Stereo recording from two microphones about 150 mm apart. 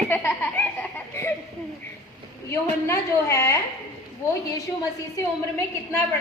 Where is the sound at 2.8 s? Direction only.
20° left (ahead or behind).